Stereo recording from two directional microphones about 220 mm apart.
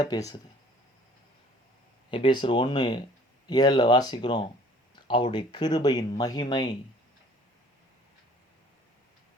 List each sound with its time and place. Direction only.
0.0 s speech: 15° left (ahead or behind)
2.0 s speech: 25° left (ahead or behind)